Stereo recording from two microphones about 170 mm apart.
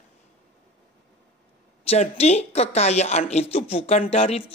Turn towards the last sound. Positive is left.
turn(degrees=35)  # may be behind; listen again after turning